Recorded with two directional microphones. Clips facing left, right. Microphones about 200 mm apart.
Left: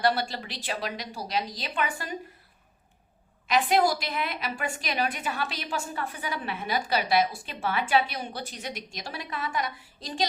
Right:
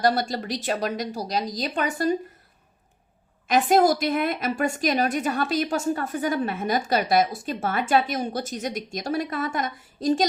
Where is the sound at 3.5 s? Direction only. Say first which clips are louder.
Right 5 dB; 45° right (ahead or behind).